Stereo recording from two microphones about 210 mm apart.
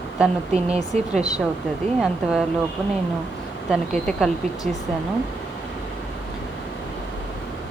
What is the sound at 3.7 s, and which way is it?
Speech, centre (ahead or behind).